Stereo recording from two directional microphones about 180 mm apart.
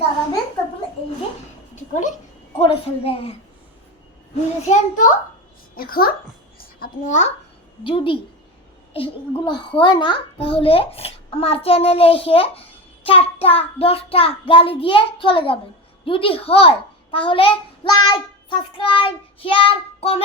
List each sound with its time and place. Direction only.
1.7 s cat: 40° left (ahead or behind)
2.6 s a child's voice: 30° left (ahead or behind)
4.6 s a child's voice: 45° left (ahead or behind)
5.7 s a child's voice: 55° left (ahead or behind)
7.9 s a child's voice: 30° left (ahead or behind)